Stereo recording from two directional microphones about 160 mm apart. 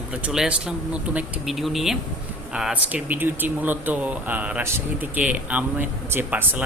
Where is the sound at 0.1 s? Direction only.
5° right (ahead or behind).